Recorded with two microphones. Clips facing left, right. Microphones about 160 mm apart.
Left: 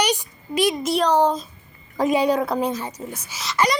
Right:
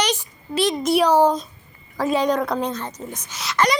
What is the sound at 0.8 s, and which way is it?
Speech, 5° right (ahead or behind).